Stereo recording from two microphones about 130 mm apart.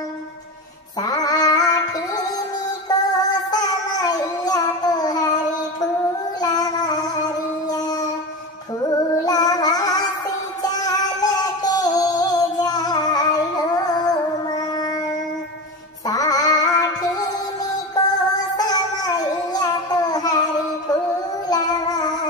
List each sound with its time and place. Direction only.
1.0 s music: 30° left (ahead or behind)
6.4 s music: 30° left (ahead or behind)
16.1 s music: 30° left (ahead or behind)
18.6 s child singing: 30° left (ahead or behind)
21.5 s child singing: 30° left (ahead or behind)